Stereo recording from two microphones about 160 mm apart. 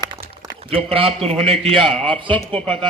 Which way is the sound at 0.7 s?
35° right (ahead or behind).